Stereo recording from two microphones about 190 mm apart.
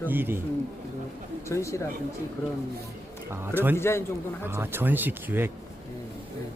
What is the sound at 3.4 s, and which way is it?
Speech, 10° right (ahead or behind).